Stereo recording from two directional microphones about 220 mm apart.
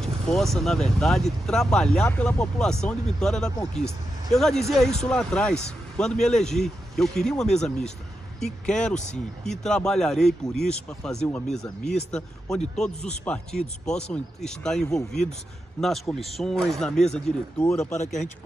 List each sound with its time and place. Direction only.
0.0 s speech: centre (ahead or behind)
17.9 s speech: 35° left (ahead or behind)